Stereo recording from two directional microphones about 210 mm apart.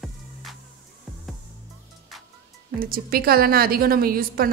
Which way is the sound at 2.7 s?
45° right (ahead or behind).